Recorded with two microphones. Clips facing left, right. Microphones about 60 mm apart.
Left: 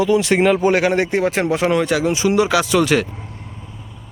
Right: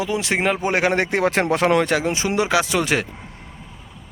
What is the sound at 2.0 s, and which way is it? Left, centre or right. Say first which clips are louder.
Speech: left 5 dB; right.